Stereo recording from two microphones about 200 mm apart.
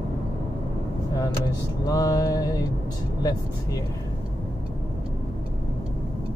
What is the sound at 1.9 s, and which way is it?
Mantra, 20° left (ahead or behind).